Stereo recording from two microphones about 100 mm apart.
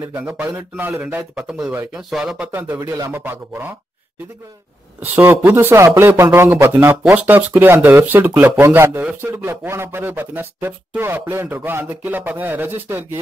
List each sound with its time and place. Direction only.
0.0 s speech: 20° right (ahead or behind)
2.0 s speech: 5° right (ahead or behind)
2.5 s speech: 25° right (ahead or behind)
5.0 s speech: 20° right (ahead or behind)